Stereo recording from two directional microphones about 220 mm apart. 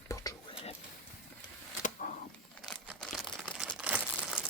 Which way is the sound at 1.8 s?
35° left (ahead or behind).